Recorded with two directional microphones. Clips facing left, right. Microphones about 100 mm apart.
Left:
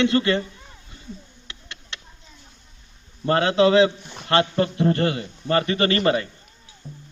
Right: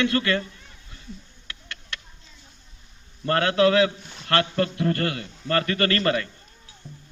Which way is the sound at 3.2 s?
20° left (ahead or behind).